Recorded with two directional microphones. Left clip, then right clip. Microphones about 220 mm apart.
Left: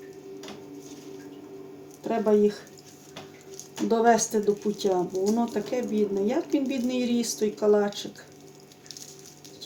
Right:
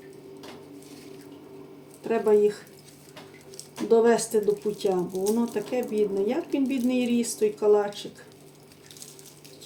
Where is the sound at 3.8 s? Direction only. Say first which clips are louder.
Right 1 dB; 30° left (ahead or behind).